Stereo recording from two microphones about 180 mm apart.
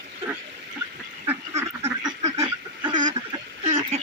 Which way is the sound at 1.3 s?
15° right (ahead or behind).